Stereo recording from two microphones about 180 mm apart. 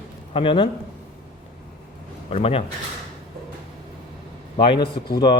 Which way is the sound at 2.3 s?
35° left (ahead or behind).